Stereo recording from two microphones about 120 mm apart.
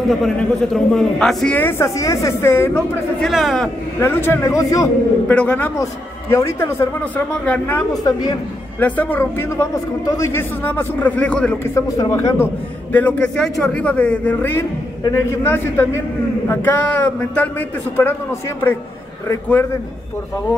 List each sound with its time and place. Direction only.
0.1 s a man's voice: centre (ahead or behind)
1.6 s speech: 20° left (ahead or behind)
3.2 s a man's voice: centre (ahead or behind)
4.0 s speech: 20° left (ahead or behind)
5.3 s a man's voice: 10° left (ahead or behind)
6.3 s a man's voice: 20° left (ahead or behind)
7.9 s a woman's voice: 35° left (ahead or behind)
8.7 s a man's voice: 15° left (ahead or behind)
11.7 s speech: 25° left (ahead or behind)
12.9 s a man's voice: 10° left (ahead or behind)